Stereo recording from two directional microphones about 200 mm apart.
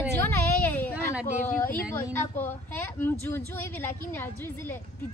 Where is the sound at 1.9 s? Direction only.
10° left (ahead or behind).